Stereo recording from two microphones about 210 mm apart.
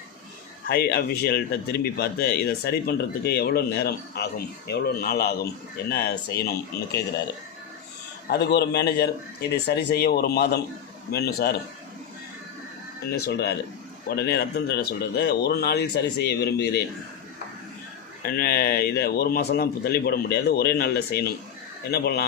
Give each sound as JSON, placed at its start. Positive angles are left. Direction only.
{"t": 0.7, "sound": "speech", "side_deg": 45}
{"t": 8.3, "sound": "speech", "side_deg": 50}
{"t": 13.2, "sound": "speech", "side_deg": 50}
{"t": 18.2, "sound": "speech", "side_deg": 45}